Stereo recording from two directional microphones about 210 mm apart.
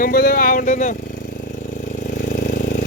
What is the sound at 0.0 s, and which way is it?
Speech, 45° left (ahead or behind).